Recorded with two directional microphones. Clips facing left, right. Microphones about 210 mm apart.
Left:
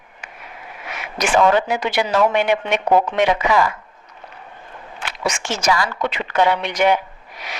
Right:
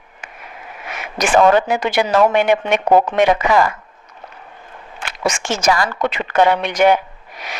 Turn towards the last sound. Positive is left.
turn(degrees=-45)  # may be behind; listen again after turning